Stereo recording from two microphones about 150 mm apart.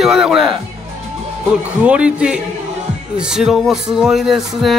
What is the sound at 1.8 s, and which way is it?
Speech, 10° right (ahead or behind).